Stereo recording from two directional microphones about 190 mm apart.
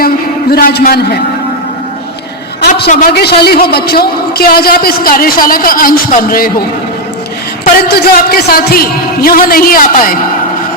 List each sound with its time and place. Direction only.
0.5 s a man's voice: 55° left (ahead or behind)
2.6 s a sound: 55° left (ahead or behind)
2.9 s a man's voice: 50° left (ahead or behind)
7.6 s a man's voice: 55° left (ahead or behind)